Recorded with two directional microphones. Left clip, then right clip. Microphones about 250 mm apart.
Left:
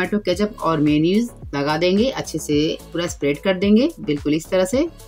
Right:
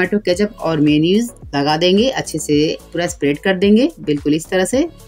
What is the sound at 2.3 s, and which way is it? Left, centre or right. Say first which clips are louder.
Speech: right 4 dB; centre.